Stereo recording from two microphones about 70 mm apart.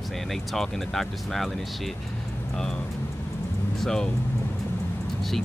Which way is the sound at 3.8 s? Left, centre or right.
Centre.